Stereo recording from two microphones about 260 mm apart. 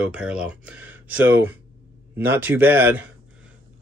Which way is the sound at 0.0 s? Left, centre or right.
Centre.